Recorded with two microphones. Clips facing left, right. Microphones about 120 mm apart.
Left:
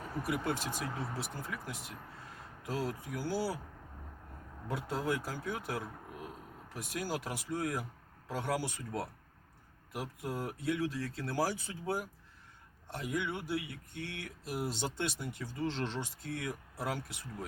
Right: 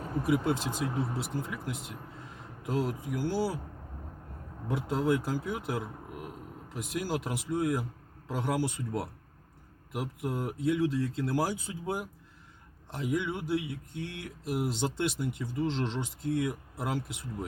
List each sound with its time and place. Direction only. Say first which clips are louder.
0.3 s speech: right 6 dB; 25° right (ahead or behind)
4.9 s speech: right 7 dB; 20° right (ahead or behind)